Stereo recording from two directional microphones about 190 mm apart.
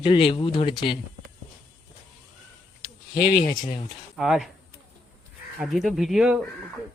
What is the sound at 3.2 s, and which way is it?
Speech, 55° left (ahead or behind).